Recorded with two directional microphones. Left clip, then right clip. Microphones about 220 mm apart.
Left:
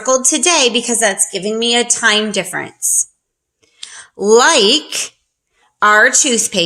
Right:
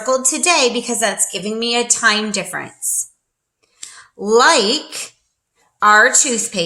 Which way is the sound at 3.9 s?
40° left (ahead or behind).